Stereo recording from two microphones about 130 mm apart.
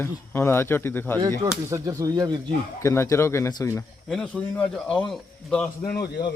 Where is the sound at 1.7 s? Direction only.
25° right (ahead or behind).